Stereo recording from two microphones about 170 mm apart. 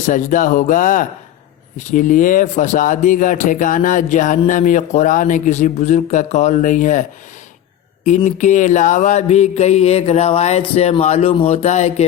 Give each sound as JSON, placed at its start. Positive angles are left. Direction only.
{"t": 0.1, "sound": "speech", "side_deg": 50}
{"t": 8.0, "sound": "mantra", "side_deg": 45}